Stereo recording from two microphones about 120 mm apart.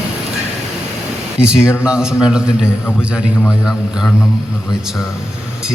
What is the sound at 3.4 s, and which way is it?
Speech, 5° left (ahead or behind).